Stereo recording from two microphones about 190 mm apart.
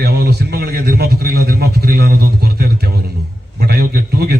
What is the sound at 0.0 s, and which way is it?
A man's voice, 55° right (ahead or behind).